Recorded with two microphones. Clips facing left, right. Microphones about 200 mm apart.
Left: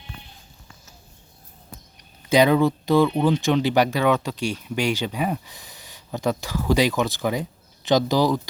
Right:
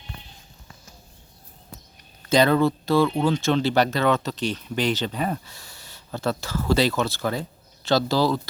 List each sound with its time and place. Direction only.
2.2 s speech: 15° left (ahead or behind)